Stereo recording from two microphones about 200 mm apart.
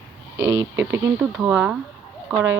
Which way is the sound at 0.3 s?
15° right (ahead or behind).